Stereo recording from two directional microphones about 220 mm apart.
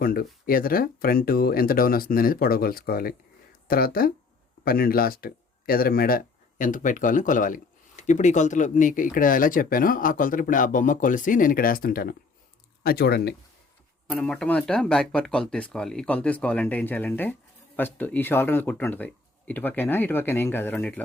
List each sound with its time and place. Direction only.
0.0 s speech: 40° left (ahead or behind)
14.1 s speech: 5° left (ahead or behind)